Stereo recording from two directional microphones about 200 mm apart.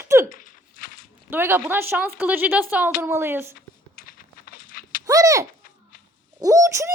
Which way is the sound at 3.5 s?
45° left (ahead or behind).